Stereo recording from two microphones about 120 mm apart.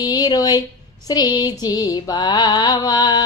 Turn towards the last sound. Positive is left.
turn(degrees=40)  # may be behind; listen again after turning